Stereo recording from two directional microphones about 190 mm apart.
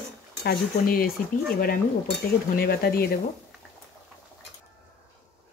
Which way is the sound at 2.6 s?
55° left (ahead or behind).